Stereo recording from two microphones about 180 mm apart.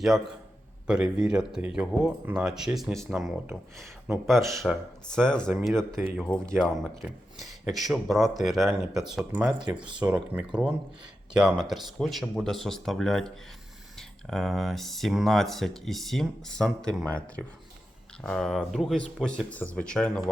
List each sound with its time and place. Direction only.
0.9 s speech: 5° right (ahead or behind)
9.8 s speech: 25° right (ahead or behind)
10.3 s speech: 5° right (ahead or behind)